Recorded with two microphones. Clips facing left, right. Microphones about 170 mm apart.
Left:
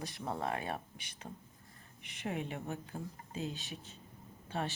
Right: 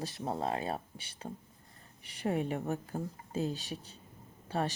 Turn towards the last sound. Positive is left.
turn(degrees=-40)  # may be behind; listen again after turning